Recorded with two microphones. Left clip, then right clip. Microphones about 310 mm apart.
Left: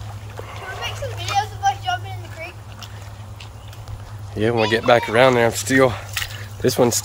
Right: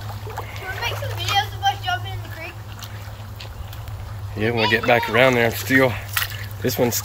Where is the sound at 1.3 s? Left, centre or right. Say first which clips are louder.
Even; centre.